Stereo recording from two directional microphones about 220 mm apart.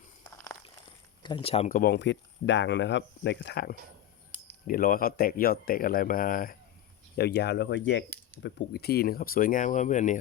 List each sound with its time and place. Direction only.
1.2 s speech: 20° left (ahead or behind)